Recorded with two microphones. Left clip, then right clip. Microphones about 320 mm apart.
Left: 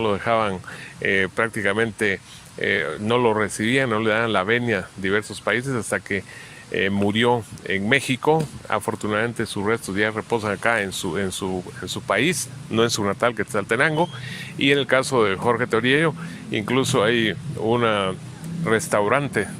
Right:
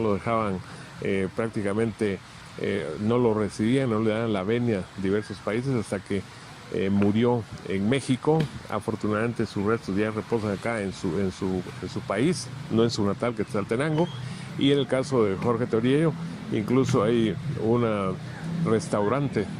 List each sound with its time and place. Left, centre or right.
0.0 s speech: left